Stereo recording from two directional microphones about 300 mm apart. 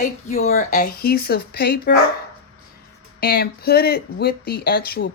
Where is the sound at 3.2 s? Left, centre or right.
Left.